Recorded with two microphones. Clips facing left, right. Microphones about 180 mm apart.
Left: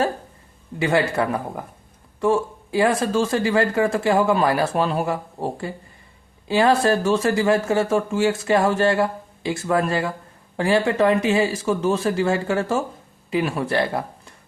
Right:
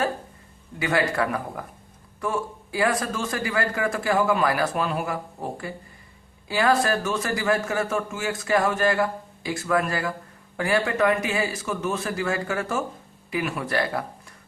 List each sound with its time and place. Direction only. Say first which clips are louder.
0.8 s speech: left 4 dB; 25° left (ahead or behind)